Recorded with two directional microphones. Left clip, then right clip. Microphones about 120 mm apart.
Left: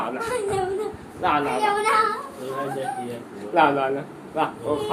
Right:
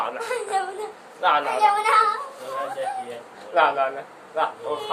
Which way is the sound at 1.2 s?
15° right (ahead or behind).